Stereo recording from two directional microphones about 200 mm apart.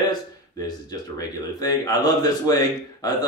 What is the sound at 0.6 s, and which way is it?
A man's voice, 20° left (ahead or behind).